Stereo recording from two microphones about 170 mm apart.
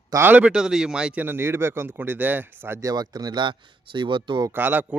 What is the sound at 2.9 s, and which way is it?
Speech, 25° right (ahead or behind).